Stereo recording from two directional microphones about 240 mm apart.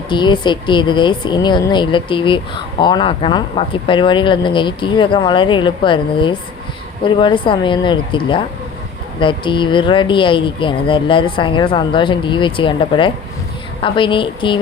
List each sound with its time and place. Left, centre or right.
0.1 s speech: centre